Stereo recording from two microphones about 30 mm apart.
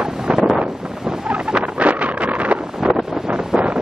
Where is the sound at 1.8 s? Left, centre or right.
Right.